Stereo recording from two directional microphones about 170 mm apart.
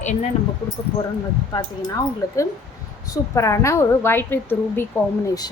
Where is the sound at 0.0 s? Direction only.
45° left (ahead or behind).